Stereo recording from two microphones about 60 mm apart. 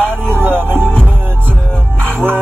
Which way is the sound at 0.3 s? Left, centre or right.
Right.